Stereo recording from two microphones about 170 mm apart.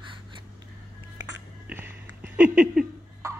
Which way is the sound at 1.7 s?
10° right (ahead or behind).